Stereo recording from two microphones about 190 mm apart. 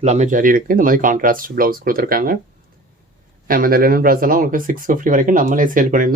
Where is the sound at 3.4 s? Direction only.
50° right (ahead or behind).